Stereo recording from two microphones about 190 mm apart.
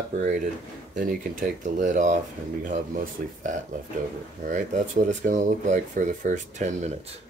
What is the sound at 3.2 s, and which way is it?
Speech, 50° right (ahead or behind).